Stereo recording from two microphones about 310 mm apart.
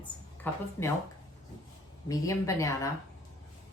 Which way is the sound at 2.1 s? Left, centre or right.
Centre.